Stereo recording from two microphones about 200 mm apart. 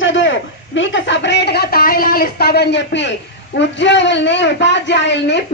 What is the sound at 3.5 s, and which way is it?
A man's voice, 60° left (ahead or behind).